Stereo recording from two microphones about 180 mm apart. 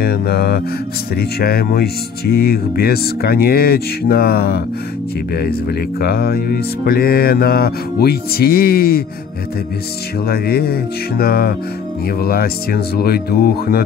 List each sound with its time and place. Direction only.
0.0 s speech: 60° left (ahead or behind)
10.2 s speech: 60° left (ahead or behind)